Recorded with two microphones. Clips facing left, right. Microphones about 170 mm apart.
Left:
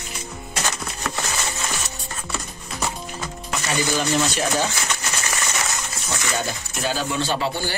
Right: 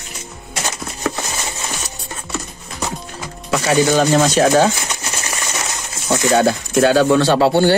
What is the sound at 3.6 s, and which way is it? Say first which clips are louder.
Speech: right 10 dB; 80° right.